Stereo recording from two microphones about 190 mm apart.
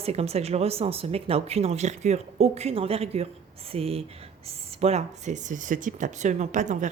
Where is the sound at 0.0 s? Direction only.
30° right (ahead or behind).